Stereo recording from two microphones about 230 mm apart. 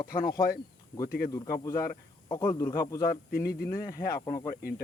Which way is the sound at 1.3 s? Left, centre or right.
Centre.